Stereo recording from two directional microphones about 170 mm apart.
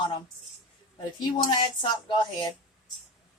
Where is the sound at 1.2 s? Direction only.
25° left (ahead or behind).